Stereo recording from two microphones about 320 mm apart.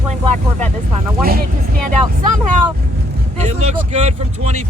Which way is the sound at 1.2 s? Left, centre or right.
Right.